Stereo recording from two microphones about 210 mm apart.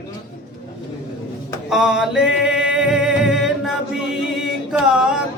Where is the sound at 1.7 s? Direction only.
Centre (ahead or behind).